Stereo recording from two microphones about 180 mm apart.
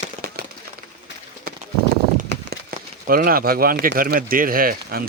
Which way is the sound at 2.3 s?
60° right (ahead or behind).